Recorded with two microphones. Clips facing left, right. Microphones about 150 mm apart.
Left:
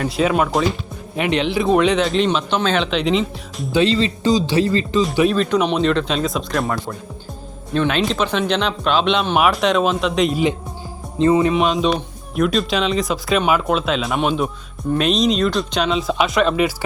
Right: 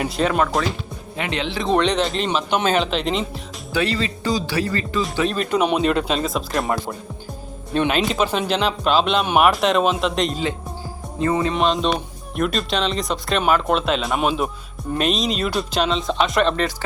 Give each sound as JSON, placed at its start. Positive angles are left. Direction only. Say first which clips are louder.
{"t": 0.2, "sound": "a man's voice", "louder": "left 3 dB", "side_deg": 10}
{"t": 3.7, "sound": "speech", "louder": "left 5 dB", "side_deg": 20}
{"t": 5.4, "sound": "speech", "louder": "left 2 dB", "side_deg": -5}
{"t": 7.9, "sound": "speech", "louder": "even", "side_deg": -5}
{"t": 11.2, "sound": "speech", "louder": "left 6 dB", "side_deg": 20}
{"t": 11.5, "sound": "speech", "louder": "left 2 dB", "side_deg": 5}